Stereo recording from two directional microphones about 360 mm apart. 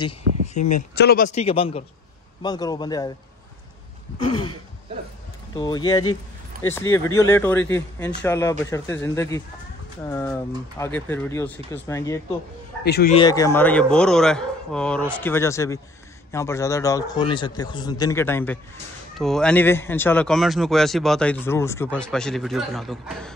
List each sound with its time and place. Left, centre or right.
0.9 s a man's voice: left
5.5 s a man's voice: centre
12.8 s a man's voice: left
13.2 s a man's voice: centre